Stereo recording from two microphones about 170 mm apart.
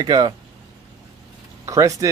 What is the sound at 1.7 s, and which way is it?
Speech, 20° right (ahead or behind).